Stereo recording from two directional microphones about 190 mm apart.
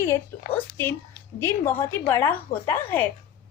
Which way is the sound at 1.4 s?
10° left (ahead or behind).